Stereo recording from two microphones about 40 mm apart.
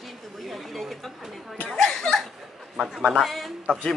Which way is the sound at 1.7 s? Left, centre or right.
Centre.